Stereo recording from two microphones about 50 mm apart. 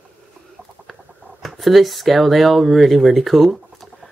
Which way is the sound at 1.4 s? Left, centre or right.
Centre.